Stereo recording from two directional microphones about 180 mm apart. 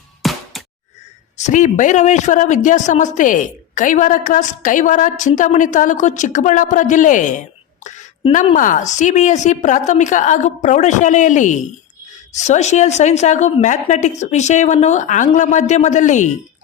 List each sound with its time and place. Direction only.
0.2 s music: centre (ahead or behind)
1.4 s speech: 40° left (ahead or behind)
8.5 s a woman's voice: 45° left (ahead or behind)